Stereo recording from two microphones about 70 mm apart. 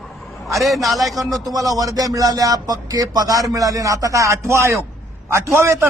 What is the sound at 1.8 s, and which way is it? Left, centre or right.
A man's voice, right.